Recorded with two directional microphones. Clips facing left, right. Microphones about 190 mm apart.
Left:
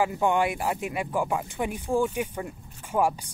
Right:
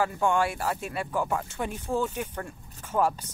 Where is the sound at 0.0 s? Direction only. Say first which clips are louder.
Left 1 dB; 15° left (ahead or behind).